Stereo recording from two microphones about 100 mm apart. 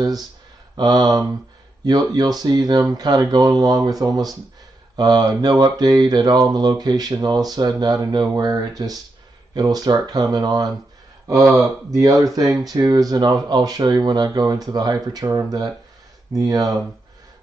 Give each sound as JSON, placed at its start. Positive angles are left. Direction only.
{"t": 0.0, "sound": "mantra", "side_deg": -40}
{"t": 11.9, "sound": "mantra", "side_deg": -35}